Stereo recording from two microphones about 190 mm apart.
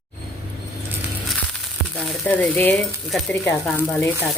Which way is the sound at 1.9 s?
5° left (ahead or behind).